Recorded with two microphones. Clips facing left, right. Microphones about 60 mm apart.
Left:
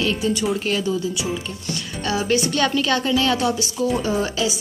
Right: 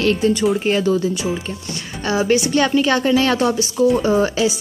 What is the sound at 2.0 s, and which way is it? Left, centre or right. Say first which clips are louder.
Speech: right 4 dB; right.